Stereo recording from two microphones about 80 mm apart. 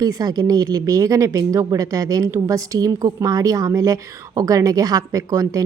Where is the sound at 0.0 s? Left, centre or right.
Right.